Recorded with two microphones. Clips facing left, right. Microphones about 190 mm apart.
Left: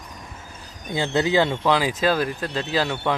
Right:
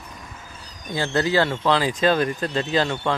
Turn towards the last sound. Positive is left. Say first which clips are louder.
# right 1 dB
turn(degrees=5)  # may be behind; listen again after turning